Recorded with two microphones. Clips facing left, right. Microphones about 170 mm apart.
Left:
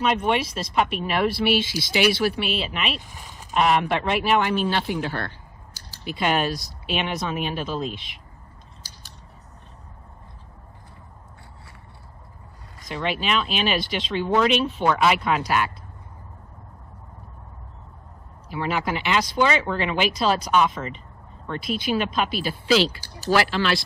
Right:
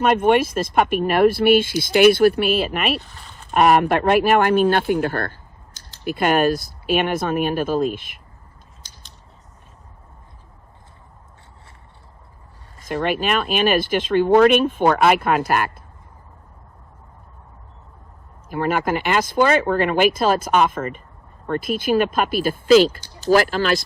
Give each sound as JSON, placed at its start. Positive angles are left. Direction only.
{"t": 0.0, "sound": "speech", "side_deg": -55}
{"t": 3.0, "sound": "speech", "side_deg": 15}
{"t": 3.5, "sound": "speech", "side_deg": -50}
{"t": 12.9, "sound": "speech", "side_deg": -50}
{"t": 18.4, "sound": "speech", "side_deg": -50}